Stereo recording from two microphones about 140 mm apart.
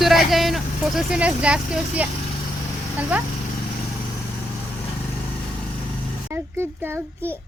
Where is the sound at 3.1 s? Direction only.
10° right (ahead or behind).